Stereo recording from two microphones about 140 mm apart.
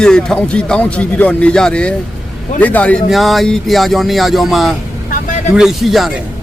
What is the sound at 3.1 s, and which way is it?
Speech, centre (ahead or behind).